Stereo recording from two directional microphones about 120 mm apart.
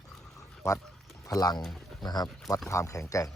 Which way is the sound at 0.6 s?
25° left (ahead or behind).